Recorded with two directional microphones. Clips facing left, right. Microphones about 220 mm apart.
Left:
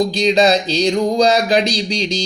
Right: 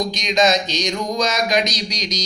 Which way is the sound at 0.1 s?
35° left (ahead or behind).